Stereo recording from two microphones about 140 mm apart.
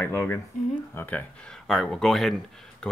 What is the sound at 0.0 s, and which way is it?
Speech, 15° left (ahead or behind).